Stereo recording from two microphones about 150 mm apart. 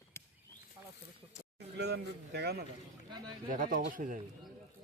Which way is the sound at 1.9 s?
90° right.